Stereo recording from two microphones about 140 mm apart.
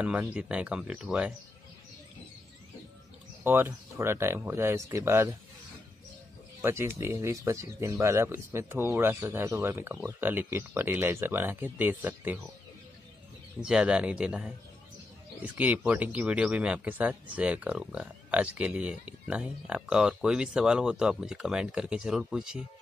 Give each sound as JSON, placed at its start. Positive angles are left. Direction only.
{"t": 0.0, "sound": "a man's voice", "side_deg": -10}
{"t": 3.4, "sound": "speech", "side_deg": -15}
{"t": 6.6, "sound": "a man's voice", "side_deg": -15}
{"t": 13.6, "sound": "a man's voice", "side_deg": -5}